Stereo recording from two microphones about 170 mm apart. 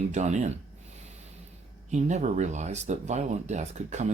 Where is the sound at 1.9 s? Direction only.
45° right (ahead or behind).